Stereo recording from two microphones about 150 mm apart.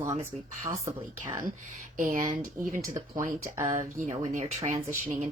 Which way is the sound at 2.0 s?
60° right (ahead or behind).